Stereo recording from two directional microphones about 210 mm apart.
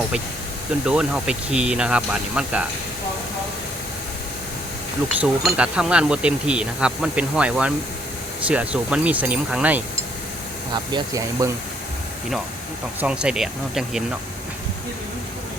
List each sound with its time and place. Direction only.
0.9 s speech: 5° right (ahead or behind)
5.2 s speech: 5° right (ahead or behind)
10.9 s speech: 15° right (ahead or behind)
13.0 s speech: 5° right (ahead or behind)